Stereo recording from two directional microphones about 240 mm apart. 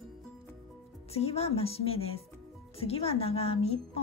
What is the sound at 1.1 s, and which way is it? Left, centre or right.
Speech, left.